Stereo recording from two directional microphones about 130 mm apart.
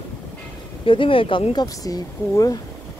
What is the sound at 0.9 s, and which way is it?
Speech, 40° left (ahead or behind).